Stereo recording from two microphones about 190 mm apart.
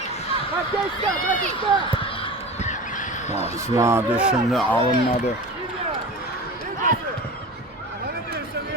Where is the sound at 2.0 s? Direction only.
30° left (ahead or behind).